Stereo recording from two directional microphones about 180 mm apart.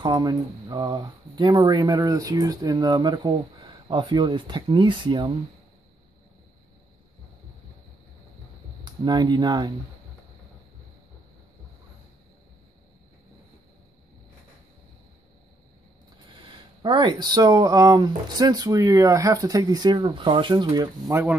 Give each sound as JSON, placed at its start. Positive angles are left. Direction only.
{"t": 0.0, "sound": "speech", "side_deg": -20}
{"t": 8.8, "sound": "speech", "side_deg": -25}
{"t": 16.8, "sound": "speech", "side_deg": -25}